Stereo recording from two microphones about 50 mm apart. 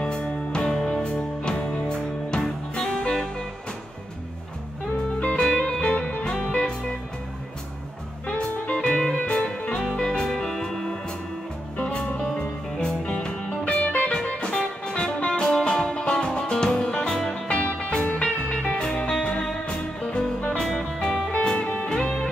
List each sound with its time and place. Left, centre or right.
0.0 s music: left
4.9 s music: left
5.4 s music: centre
5.7 s music: left
8.3 s music: left
11.8 s music: left